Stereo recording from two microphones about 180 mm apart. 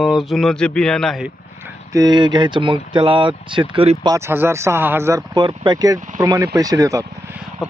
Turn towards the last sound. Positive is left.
turn(degrees=-15)  # may be behind; listen again after turning